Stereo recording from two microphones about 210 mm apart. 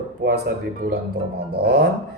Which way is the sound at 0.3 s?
50° right (ahead or behind).